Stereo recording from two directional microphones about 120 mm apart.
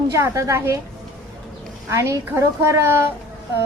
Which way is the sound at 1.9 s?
25° right (ahead or behind).